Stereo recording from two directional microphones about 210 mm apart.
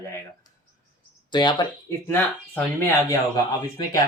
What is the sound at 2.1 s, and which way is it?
Speech, 10° left (ahead or behind).